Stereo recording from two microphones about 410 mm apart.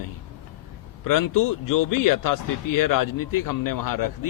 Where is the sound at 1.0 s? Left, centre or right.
Left.